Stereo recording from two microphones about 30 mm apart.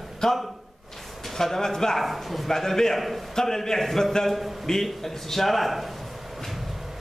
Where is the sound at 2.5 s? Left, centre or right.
Centre.